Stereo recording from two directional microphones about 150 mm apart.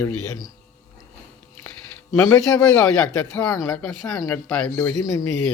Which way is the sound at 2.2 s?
20° left (ahead or behind).